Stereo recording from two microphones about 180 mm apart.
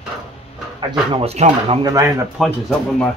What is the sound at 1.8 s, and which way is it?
Speech, 15° right (ahead or behind).